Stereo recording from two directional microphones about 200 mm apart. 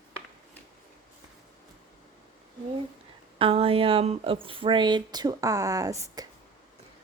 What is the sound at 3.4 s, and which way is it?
A woman's voice, 30° right (ahead or behind).